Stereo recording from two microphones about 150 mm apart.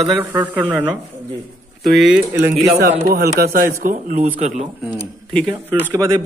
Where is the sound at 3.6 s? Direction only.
15° right (ahead or behind).